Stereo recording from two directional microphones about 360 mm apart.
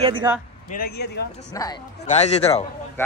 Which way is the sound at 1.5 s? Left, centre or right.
Centre.